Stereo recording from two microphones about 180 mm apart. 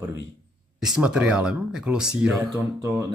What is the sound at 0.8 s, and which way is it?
Speech, 5° right (ahead or behind).